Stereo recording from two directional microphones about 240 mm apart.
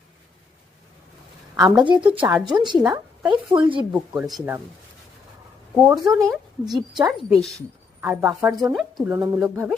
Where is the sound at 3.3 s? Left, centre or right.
Right.